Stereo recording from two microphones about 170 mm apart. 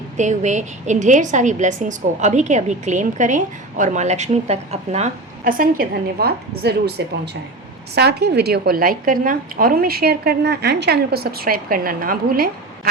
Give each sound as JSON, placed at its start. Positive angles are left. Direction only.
{"t": 0.2, "sound": "a woman's voice", "side_deg": -45}
{"t": 5.5, "sound": "a woman's voice", "side_deg": -60}